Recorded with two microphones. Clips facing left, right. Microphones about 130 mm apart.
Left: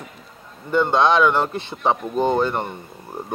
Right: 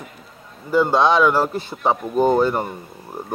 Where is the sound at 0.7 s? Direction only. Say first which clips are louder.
Right 1 dB; 5° right (ahead or behind).